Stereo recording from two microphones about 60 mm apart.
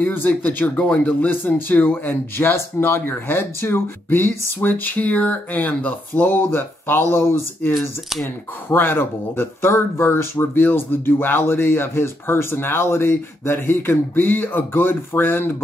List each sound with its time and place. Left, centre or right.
0.0 s speech: left
10.3 s speech: left